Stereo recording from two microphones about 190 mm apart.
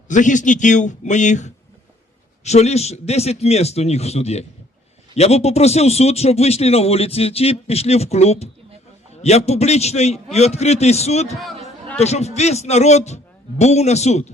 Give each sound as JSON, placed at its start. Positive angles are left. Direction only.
{"t": 0.1, "sound": "a man's voice", "side_deg": 40}